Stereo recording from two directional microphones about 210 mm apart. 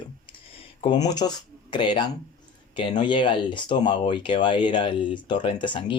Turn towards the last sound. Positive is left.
turn(degrees=20)  # may be behind; listen again after turning